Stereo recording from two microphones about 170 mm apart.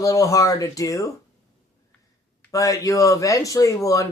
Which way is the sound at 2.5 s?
20° left (ahead or behind).